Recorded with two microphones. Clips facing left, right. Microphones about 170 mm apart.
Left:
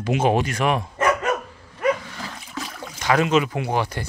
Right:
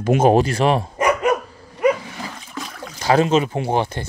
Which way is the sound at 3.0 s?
30° right (ahead or behind).